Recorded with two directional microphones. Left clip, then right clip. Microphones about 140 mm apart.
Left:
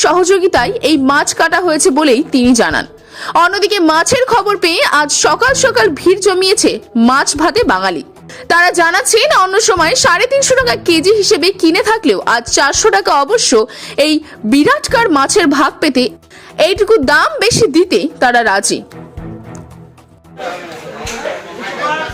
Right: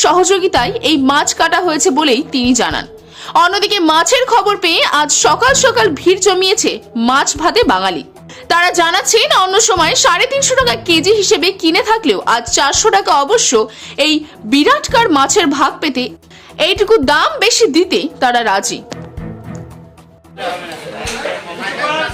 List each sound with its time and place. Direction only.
0.0 s a woman's voice: 30° left (ahead or behind)